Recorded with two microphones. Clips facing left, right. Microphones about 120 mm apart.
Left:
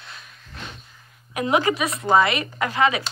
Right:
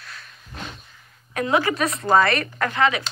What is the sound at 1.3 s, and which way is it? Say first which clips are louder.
A woman's voice: even; 20° left (ahead or behind).